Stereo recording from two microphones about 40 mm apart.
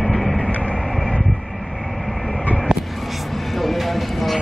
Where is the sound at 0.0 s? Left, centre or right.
Centre.